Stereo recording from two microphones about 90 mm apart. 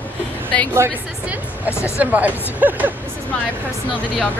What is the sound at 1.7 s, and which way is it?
Speech, 30° left (ahead or behind).